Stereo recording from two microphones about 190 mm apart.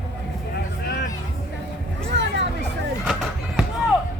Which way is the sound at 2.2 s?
70° right (ahead or behind).